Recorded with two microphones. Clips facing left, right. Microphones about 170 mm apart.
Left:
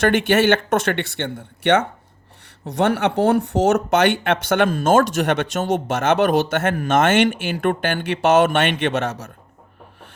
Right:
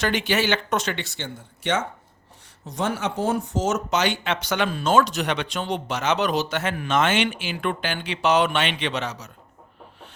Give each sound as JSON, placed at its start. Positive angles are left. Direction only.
{"t": 0.0, "sound": "speech", "side_deg": 50}